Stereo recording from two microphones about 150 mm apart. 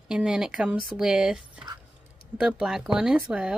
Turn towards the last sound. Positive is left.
turn(degrees=-5)  # may be behind; listen again after turning